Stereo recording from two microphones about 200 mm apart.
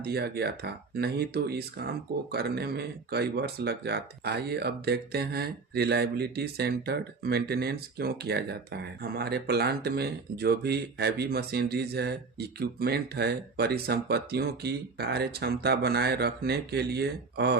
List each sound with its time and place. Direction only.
0.0 s speech: 50° right (ahead or behind)